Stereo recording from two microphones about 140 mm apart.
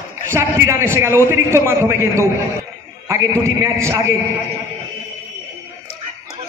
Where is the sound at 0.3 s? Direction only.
20° right (ahead or behind).